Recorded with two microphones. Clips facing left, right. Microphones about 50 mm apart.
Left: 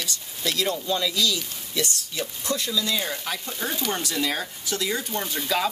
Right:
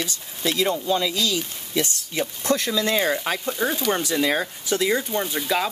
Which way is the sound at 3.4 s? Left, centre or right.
Centre.